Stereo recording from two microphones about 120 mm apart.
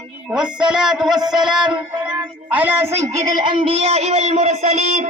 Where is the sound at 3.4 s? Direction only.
50° right (ahead or behind); by 5.1 s 70° right (ahead or behind).